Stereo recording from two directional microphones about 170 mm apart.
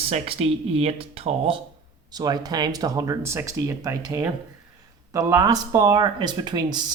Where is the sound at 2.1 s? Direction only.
25° right (ahead or behind).